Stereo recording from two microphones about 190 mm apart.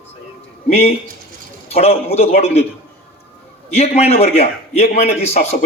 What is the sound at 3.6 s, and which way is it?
A man's voice, 35° left (ahead or behind).